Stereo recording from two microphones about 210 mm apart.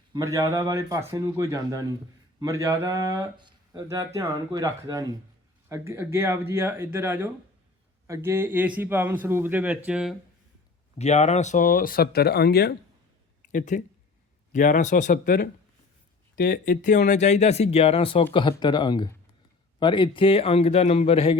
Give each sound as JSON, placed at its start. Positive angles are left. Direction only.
{"t": 0.1, "sound": "speech", "side_deg": -15}
{"t": 10.9, "sound": "speech", "side_deg": 30}
{"t": 13.5, "sound": "speech", "side_deg": 40}